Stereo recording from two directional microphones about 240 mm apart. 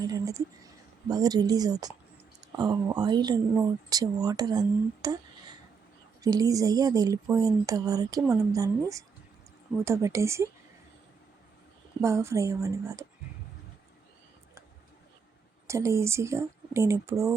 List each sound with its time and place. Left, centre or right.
0.0 s speech: centre
6.2 s speech: centre
9.8 s speech: centre
12.0 s speech: centre
15.6 s speech: centre